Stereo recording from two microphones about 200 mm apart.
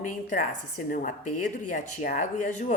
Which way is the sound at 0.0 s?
40° left (ahead or behind).